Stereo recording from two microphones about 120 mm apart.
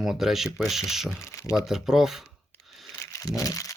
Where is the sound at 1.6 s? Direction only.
5° right (ahead or behind).